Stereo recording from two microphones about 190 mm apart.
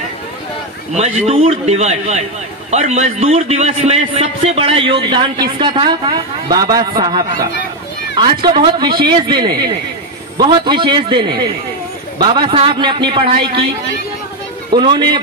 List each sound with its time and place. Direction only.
0.9 s a man's voice: 35° right (ahead or behind)
14.7 s a man's voice: 25° right (ahead or behind)